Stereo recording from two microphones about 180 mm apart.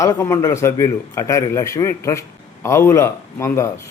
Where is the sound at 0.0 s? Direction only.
15° left (ahead or behind).